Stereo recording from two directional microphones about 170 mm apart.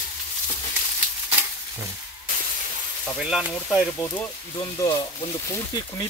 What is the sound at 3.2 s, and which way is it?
Speech, 5° right (ahead or behind).